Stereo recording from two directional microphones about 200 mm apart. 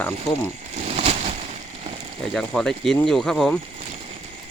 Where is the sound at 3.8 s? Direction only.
30° right (ahead or behind).